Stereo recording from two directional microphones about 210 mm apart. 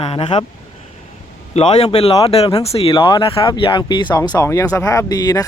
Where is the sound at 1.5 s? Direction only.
30° left (ahead or behind).